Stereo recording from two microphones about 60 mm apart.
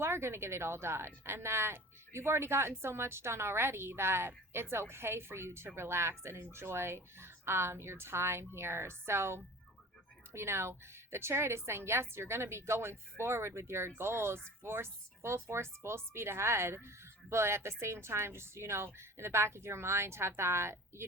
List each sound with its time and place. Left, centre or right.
0.0 s speech: right